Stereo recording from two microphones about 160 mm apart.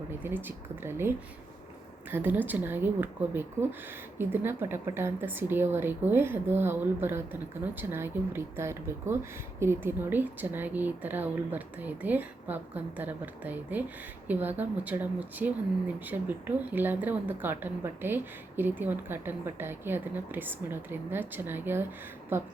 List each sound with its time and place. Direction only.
0.4 s a woman's voice: 15° right (ahead or behind)